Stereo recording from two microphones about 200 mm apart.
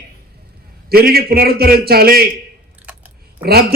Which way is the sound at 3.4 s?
50° right (ahead or behind).